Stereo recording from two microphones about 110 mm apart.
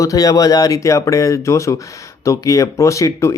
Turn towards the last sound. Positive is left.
turn(degrees=30)  # may be behind; listen again after turning